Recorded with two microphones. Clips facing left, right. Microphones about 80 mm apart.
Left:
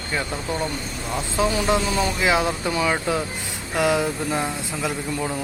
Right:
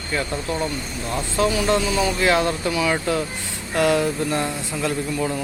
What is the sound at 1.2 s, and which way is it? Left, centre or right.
Speech, centre.